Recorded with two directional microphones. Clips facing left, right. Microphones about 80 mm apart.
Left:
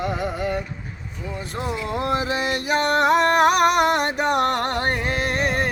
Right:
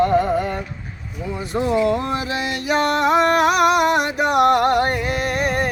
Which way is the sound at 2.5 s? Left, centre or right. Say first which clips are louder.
Right 2 dB; left.